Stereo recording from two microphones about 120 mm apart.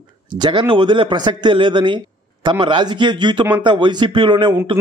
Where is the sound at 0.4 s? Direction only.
40° right (ahead or behind).